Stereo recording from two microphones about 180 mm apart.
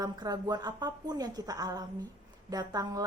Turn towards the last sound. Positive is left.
turn(degrees=-20)  # may be behind; listen again after turning